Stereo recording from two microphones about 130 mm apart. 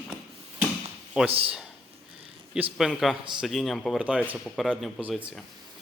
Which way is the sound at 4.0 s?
10° right (ahead or behind).